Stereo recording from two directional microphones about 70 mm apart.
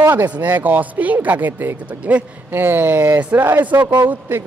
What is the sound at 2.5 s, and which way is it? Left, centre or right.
Speech, right.